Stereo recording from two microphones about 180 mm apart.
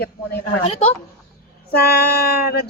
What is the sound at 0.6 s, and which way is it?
Speech, 35° left (ahead or behind).